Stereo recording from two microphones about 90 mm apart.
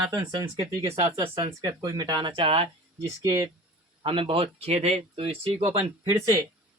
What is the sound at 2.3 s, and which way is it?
Speech, 85° right.